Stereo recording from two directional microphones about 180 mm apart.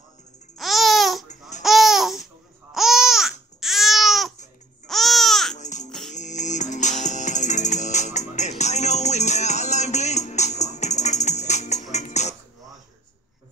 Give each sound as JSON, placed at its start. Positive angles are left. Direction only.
{"t": 0.6, "sound": "babbling", "side_deg": 0}
{"t": 5.6, "sound": "music", "side_deg": 40}